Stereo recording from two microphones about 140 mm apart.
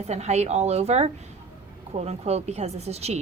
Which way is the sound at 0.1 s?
50° right (ahead or behind).